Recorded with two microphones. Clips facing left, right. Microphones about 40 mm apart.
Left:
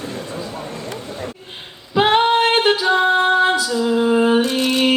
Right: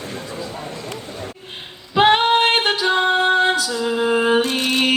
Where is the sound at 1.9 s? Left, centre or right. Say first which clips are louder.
Even; centre.